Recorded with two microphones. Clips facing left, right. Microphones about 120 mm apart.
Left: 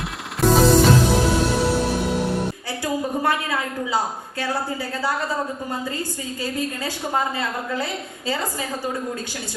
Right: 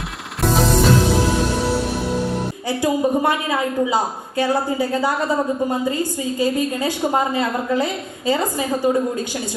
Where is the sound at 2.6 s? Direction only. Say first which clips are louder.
Right 7 dB; 20° right (ahead or behind).